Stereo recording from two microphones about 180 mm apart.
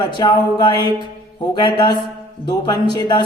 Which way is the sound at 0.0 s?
25° left (ahead or behind).